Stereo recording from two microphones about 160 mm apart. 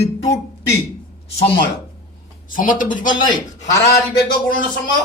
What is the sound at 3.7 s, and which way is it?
Speech, 20° left (ahead or behind).